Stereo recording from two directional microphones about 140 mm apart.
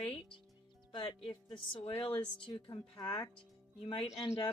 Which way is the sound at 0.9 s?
35° left (ahead or behind).